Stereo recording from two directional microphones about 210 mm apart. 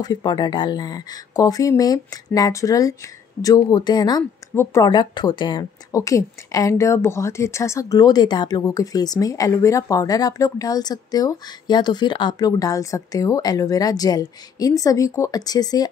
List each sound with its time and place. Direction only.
0.0 s speech: 20° left (ahead or behind)